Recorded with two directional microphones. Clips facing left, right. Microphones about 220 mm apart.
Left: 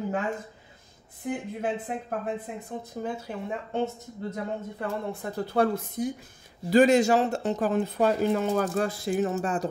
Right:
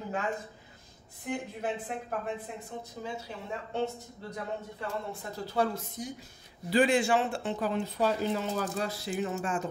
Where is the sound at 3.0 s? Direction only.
50° left (ahead or behind).